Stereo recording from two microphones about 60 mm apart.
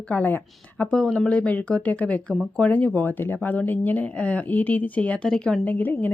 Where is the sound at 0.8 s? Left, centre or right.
Centre.